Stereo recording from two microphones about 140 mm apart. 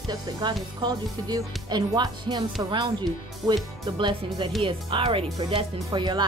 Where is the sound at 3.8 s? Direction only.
35° right (ahead or behind).